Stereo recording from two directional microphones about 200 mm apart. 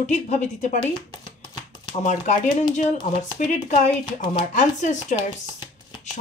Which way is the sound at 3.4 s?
40° left (ahead or behind).